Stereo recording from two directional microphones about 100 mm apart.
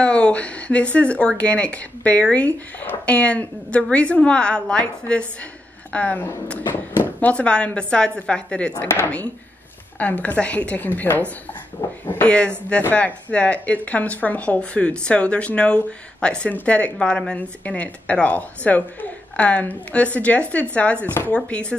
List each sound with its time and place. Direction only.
0.0 s speech: 10° left (ahead or behind)
9.9 s speech: 15° left (ahead or behind)
12.3 s speech: 10° left (ahead or behind)